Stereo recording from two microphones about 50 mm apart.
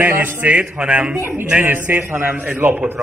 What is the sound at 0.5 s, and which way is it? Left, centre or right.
Speech, right.